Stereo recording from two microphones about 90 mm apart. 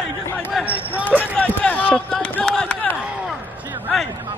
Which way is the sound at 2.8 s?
10° right (ahead or behind).